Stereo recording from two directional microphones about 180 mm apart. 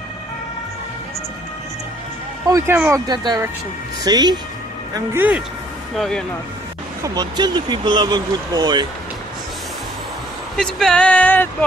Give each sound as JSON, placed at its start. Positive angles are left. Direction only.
{"t": 2.5, "sound": "speech", "side_deg": -10}
{"t": 4.9, "sound": "speech", "side_deg": -10}
{"t": 5.9, "sound": "speech", "side_deg": 5}
{"t": 7.0, "sound": "speech", "side_deg": -25}
{"t": 10.6, "sound": "a sound", "side_deg": 5}